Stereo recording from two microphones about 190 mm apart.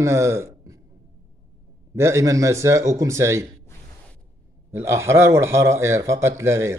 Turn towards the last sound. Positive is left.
turn(degrees=-15)  # may be behind; listen again after turning